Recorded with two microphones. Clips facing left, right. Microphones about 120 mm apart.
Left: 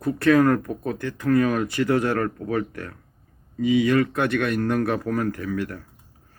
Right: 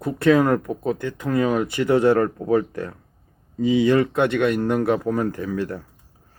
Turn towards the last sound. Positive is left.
turn(degrees=-25)  # may be behind; listen again after turning